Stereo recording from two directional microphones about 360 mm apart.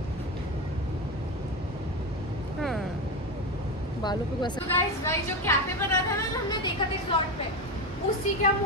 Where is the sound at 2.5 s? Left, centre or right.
Centre.